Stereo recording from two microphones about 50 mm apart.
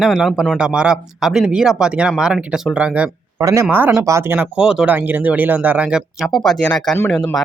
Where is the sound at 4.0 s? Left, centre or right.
Right.